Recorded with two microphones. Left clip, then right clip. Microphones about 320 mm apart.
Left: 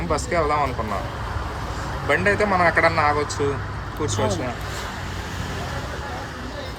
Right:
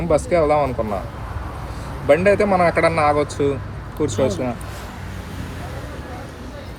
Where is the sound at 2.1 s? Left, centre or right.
Centre.